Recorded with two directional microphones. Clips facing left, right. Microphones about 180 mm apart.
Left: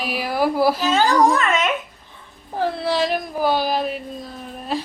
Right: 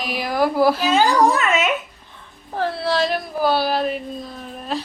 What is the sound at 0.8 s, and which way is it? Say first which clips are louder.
Speech: even; 10° right (ahead or behind).